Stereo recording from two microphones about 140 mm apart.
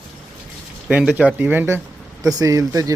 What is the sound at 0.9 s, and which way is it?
A man's voice, 10° right (ahead or behind).